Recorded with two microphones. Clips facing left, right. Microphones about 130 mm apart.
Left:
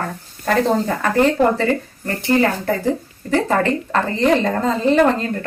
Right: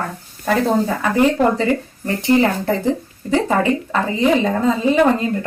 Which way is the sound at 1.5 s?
20° right (ahead or behind).